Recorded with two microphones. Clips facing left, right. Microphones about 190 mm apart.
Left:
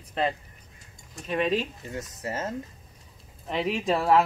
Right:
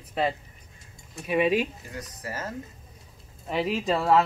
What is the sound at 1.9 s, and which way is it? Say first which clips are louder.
Speech: left 3 dB; 25° left (ahead or behind).